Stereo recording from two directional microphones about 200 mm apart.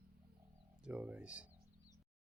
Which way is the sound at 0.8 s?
5° right (ahead or behind).